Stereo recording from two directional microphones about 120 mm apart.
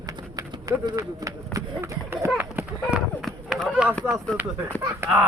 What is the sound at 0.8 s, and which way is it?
Speech, 30° right (ahead or behind).